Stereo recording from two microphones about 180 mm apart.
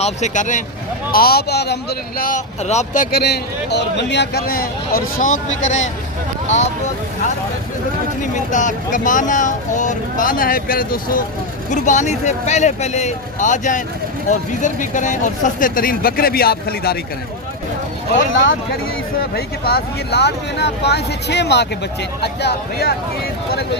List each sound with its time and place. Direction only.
0.0 s speech: 40° left (ahead or behind)
1.1 s speech: 60° left (ahead or behind); by 5.9 s 40° left (ahead or behind)
8.2 s speech: 45° left (ahead or behind)
11.7 s speech: 40° left (ahead or behind); by 17.0 s 60° left (ahead or behind)
19.2 s speech: 60° left (ahead or behind)